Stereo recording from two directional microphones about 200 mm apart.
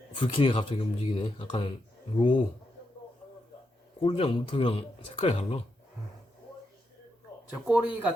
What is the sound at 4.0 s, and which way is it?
Speech, 25° left (ahead or behind).